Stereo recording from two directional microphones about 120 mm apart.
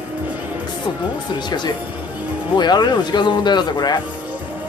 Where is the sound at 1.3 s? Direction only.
40° left (ahead or behind).